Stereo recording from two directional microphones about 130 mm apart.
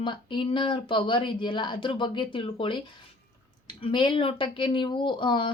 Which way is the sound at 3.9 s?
40° left (ahead or behind).